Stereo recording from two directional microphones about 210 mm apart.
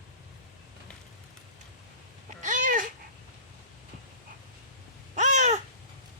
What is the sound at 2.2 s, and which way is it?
Cat, 40° right (ahead or behind).